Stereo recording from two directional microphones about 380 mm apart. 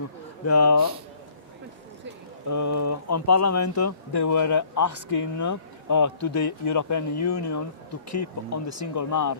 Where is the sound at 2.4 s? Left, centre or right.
Left.